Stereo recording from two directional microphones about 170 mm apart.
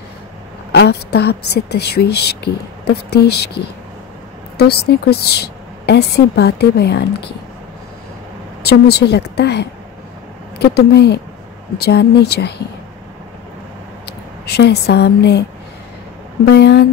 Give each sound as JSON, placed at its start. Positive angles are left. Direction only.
{"t": 0.7, "sound": "a woman's voice", "side_deg": 75}
{"t": 8.6, "sound": "a woman's voice", "side_deg": 70}
{"t": 14.0, "sound": "speech", "side_deg": 70}
{"t": 16.4, "sound": "a woman's voice", "side_deg": 75}